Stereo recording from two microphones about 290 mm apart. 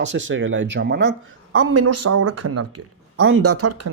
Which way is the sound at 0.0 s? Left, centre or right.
Right.